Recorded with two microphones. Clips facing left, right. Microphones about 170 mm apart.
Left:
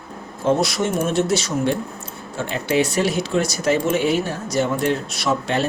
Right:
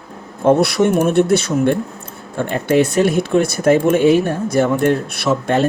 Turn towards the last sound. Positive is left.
turn(degrees=-55)  # may be behind; listen again after turning